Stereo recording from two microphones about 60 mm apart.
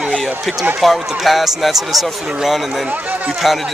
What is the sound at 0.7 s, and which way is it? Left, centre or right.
Speech, centre.